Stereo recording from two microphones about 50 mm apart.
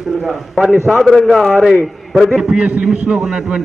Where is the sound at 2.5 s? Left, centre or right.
Right.